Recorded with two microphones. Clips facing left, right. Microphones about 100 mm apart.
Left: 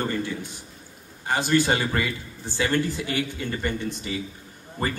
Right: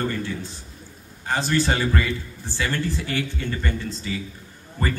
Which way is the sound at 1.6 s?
25° left (ahead or behind).